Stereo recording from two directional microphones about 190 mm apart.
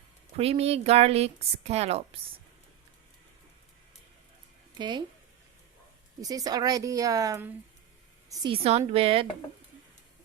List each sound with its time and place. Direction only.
0.3 s a woman's voice: 30° right (ahead or behind)
4.8 s a woman's voice: 25° right (ahead or behind)
6.2 s a woman's voice: 20° right (ahead or behind)
8.3 s a woman's voice: 25° right (ahead or behind)